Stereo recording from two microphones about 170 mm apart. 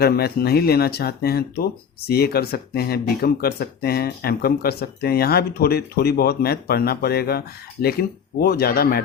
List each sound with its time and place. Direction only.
0.0 s speech: 65° left (ahead or behind)